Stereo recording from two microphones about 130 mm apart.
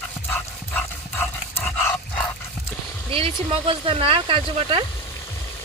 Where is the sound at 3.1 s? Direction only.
45° right (ahead or behind).